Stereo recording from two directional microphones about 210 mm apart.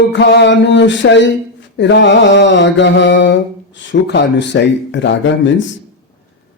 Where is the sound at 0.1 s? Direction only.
55° left (ahead or behind).